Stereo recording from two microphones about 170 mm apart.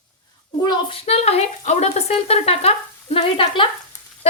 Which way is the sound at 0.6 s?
30° left (ahead or behind).